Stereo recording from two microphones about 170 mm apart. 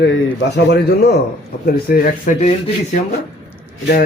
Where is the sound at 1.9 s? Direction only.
55° left (ahead or behind).